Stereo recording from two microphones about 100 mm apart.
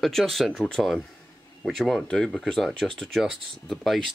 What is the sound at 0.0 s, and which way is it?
Speech, centre (ahead or behind).